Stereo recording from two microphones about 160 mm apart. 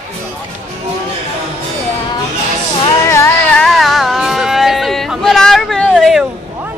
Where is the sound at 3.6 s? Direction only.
Centre (ahead or behind).